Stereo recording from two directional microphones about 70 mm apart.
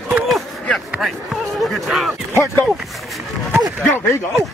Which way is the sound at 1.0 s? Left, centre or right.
Centre.